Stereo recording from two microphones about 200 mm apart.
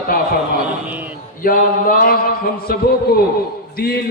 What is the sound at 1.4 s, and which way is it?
A man's voice, 45° left (ahead or behind).